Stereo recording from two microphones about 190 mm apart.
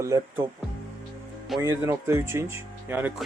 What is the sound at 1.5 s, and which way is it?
Speech, 15° right (ahead or behind).